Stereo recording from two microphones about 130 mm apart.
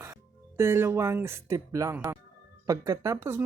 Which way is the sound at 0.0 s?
20° right (ahead or behind).